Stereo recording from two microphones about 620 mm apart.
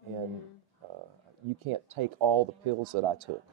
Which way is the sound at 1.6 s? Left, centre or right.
Right.